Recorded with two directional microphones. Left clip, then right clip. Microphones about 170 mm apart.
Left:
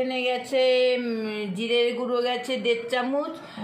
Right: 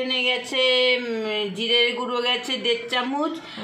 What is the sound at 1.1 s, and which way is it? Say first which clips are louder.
Speech: right 5 dB; 35° right (ahead or behind).